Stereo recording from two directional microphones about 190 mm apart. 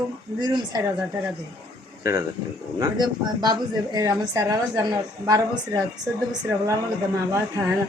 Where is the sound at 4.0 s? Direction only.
15° right (ahead or behind).